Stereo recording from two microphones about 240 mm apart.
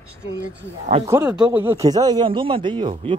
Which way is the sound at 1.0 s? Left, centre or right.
Centre.